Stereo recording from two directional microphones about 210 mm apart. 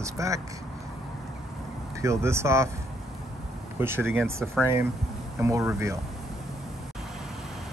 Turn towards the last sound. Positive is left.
turn(degrees=-15)  # may be behind; listen again after turning